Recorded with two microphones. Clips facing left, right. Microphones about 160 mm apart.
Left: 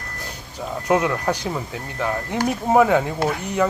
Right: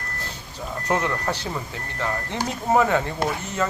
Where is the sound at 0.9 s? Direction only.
10° left (ahead or behind).